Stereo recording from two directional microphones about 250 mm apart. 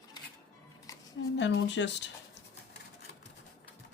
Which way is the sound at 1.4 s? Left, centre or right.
Left.